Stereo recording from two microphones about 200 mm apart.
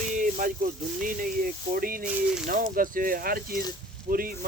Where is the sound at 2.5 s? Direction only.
45° right (ahead or behind).